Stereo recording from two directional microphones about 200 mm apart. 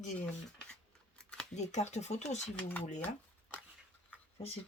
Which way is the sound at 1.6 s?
35° left (ahead or behind).